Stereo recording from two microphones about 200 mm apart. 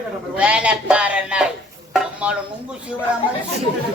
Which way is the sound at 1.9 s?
5° right (ahead or behind).